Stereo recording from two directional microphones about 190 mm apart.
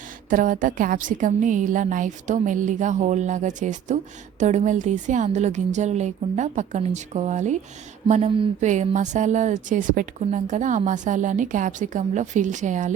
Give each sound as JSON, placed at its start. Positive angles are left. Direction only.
{"t": 0.3, "sound": "a woman's voice", "side_deg": -45}